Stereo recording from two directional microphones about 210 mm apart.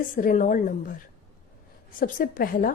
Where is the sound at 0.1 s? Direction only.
40° left (ahead or behind).